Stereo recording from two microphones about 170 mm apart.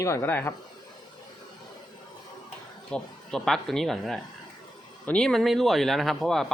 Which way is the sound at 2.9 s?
5° left (ahead or behind).